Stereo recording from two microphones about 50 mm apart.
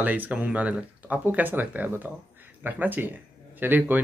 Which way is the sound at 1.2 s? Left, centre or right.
Right.